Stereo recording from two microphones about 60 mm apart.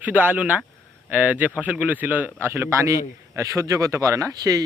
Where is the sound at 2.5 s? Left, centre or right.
Right.